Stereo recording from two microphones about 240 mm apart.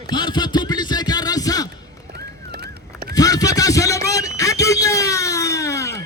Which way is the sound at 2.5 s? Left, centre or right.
Right.